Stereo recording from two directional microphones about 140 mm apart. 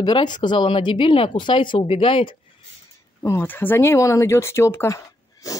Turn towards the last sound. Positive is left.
turn(degrees=25)  # may be behind; listen again after turning